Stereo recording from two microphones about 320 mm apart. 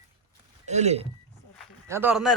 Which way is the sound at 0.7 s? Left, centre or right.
Right.